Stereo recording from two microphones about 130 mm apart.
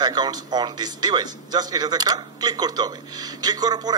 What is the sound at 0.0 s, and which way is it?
Speech, 35° right (ahead or behind).